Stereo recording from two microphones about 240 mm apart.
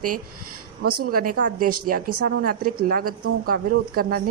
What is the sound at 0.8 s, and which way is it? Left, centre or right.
Speech, right.